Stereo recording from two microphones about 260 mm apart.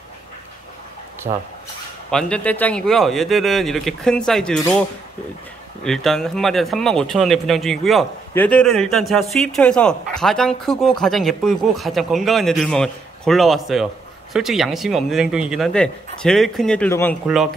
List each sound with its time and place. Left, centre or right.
1.3 s speech: centre
2.0 s speech: centre
5.9 s speech: centre